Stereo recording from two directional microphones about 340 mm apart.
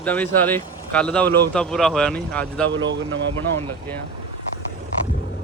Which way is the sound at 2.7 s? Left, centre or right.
Right.